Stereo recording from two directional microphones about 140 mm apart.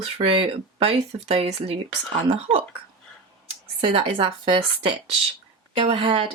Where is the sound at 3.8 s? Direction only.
40° right (ahead or behind).